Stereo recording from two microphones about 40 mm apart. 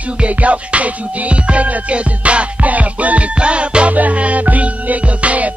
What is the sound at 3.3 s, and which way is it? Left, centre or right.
Music, right.